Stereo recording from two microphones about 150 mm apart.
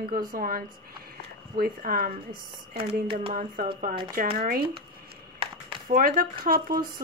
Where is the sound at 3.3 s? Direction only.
70° right (ahead or behind).